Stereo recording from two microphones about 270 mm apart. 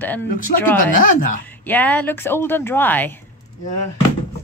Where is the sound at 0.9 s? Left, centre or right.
Left.